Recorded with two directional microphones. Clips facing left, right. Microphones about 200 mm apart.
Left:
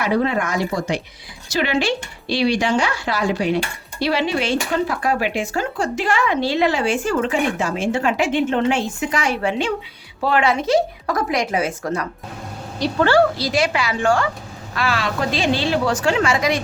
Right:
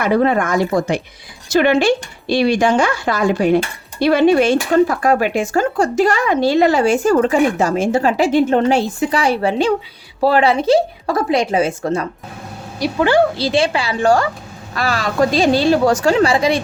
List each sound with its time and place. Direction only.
0.0 s speech: 50° right (ahead or behind); by 12.0 s 25° right (ahead or behind)
12.8 s speech: 15° right (ahead or behind); by 16.6 s 30° right (ahead or behind)